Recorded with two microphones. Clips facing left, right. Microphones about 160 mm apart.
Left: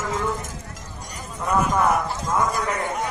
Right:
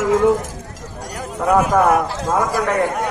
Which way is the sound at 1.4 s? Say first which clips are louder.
Right 6 dB; 75° right (ahead or behind).